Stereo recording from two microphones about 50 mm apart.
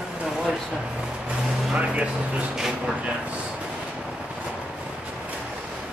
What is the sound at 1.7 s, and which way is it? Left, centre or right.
Speech, right.